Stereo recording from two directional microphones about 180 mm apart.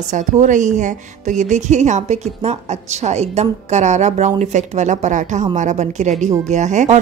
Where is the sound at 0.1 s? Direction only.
45° right (ahead or behind).